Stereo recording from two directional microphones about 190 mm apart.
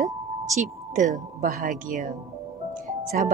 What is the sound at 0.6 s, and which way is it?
Speech, 40° right (ahead or behind).